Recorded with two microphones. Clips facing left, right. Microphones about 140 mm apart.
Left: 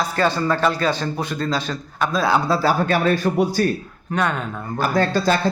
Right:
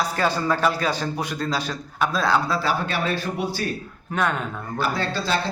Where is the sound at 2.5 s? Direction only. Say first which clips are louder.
Left 6 dB; 40° left (ahead or behind).